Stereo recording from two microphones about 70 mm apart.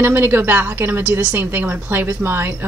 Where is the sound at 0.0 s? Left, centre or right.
Right.